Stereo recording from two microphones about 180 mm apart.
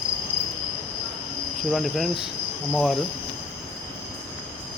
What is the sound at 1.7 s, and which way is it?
Cricket, centre (ahead or behind).